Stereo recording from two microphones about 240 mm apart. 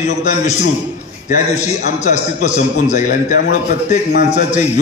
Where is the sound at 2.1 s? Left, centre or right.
Left.